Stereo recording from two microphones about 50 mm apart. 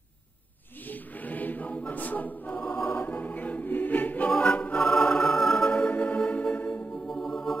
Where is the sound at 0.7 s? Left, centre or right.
Left.